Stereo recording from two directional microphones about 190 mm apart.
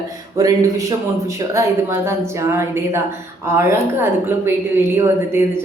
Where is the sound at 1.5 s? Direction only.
15° right (ahead or behind).